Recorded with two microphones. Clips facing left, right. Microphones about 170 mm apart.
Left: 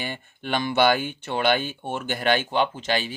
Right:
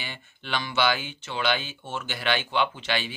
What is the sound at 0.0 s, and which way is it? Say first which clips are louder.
Speech: left 7 dB; 50° left (ahead or behind).